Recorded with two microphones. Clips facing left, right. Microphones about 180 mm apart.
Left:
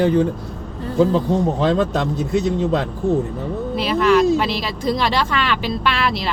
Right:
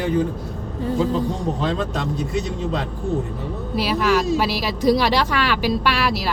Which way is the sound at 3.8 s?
5° right (ahead or behind).